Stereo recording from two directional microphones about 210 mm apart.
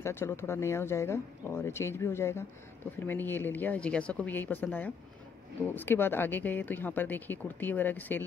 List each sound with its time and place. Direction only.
0.0 s speech: 10° left (ahead or behind)